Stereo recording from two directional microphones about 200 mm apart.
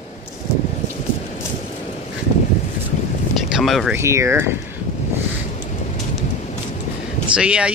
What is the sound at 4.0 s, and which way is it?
Speech, 15° right (ahead or behind).